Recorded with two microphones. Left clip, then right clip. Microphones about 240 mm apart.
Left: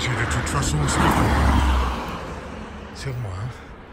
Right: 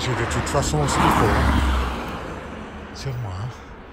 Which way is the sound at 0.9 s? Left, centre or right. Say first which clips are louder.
Right 1 dB; right.